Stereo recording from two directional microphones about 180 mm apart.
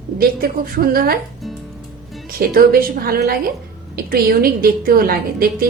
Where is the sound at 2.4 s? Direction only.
55° right (ahead or behind).